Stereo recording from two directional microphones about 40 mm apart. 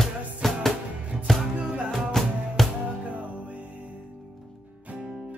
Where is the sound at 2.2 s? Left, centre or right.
Centre.